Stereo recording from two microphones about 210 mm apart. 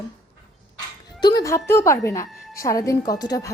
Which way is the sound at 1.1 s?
20° left (ahead or behind).